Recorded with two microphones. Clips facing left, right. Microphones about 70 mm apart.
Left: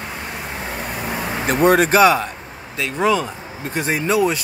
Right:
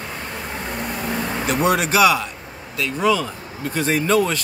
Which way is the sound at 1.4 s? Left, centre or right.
Left.